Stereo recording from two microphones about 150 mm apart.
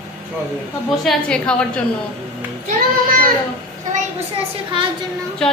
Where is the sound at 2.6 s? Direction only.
70° right (ahead or behind).